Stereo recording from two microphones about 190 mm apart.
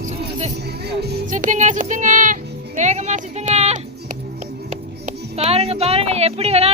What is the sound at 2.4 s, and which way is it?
Music, 60° right (ahead or behind).